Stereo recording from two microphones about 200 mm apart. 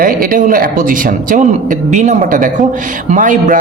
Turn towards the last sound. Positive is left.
turn(degrees=-40)  # may be behind; listen again after turning